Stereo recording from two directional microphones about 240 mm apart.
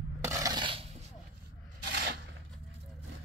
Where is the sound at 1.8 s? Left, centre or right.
Right.